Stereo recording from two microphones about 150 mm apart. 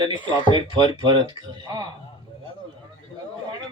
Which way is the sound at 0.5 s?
30° right (ahead or behind).